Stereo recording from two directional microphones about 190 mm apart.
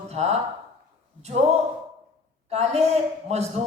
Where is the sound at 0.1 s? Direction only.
35° right (ahead or behind).